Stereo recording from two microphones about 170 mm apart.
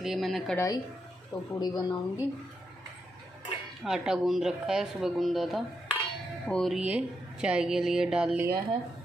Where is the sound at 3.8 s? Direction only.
5° right (ahead or behind).